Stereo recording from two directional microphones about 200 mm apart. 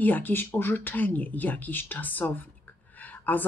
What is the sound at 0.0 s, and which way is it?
Speech, 10° left (ahead or behind).